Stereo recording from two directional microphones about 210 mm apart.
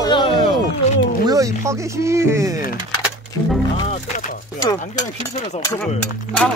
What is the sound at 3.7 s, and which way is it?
Music, 35° left (ahead or behind).